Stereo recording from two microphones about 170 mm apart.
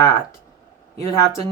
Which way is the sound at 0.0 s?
20° left (ahead or behind).